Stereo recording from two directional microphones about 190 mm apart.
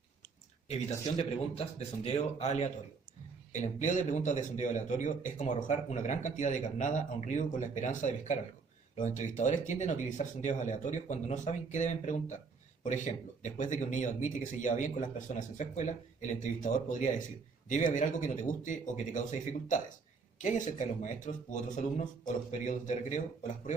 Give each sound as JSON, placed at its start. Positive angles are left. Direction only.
{"t": 0.7, "sound": "speech", "side_deg": 35}